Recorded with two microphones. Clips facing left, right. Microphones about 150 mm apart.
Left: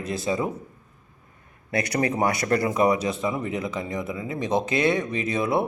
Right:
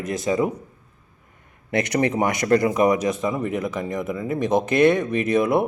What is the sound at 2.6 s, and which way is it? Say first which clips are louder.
Speech: right 3 dB; 25° left (ahead or behind).